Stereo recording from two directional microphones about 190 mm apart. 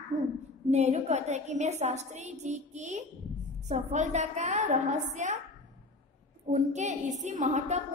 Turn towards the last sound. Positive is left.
turn(degrees=-35)  # may be behind; listen again after turning